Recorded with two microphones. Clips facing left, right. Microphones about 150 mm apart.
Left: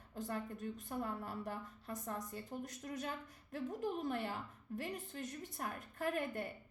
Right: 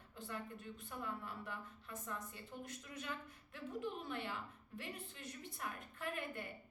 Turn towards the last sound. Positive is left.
turn(degrees=40)  # may be behind; listen again after turning